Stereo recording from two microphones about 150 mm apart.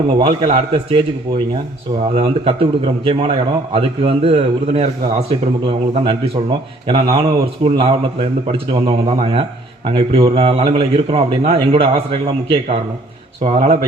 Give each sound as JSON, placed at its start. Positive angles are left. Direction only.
{"t": 0.2, "sound": "a man's voice", "side_deg": -35}
{"t": 2.1, "sound": "a man's voice", "side_deg": -40}
{"t": 9.1, "sound": "a man's voice", "side_deg": -40}